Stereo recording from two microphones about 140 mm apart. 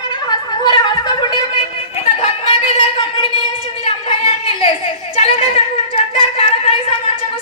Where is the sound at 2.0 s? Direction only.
45° left (ahead or behind).